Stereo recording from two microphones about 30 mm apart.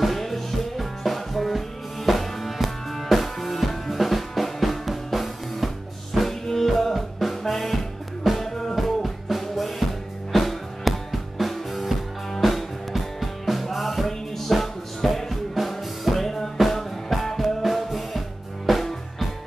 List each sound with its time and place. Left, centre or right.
0.0 s music: centre
8.5 s music: centre
8.7 s music: centre
15.6 s music: centre
16.0 s music: centre